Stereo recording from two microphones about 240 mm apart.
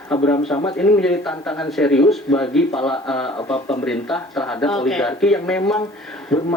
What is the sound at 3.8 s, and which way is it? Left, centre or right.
Speech, centre.